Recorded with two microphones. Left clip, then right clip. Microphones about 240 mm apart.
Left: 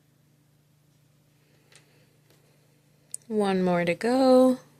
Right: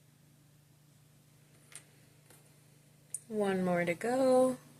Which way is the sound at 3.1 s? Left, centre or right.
Left.